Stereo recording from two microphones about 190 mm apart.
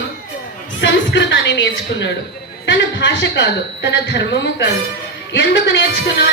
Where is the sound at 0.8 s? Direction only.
70° left (ahead or behind).